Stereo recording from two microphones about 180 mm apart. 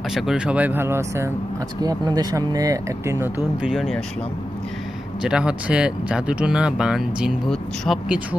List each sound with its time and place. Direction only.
0.1 s speech: centre (ahead or behind); by 3.3 s 15° right (ahead or behind)
3.6 s speech: centre (ahead or behind)
5.2 s speech: 5° right (ahead or behind)